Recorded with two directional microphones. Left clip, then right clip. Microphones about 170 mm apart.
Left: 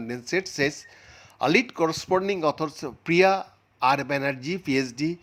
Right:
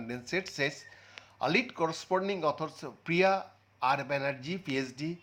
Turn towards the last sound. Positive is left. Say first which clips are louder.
# left 9 dB
turn(degrees=35)  # may be behind; listen again after turning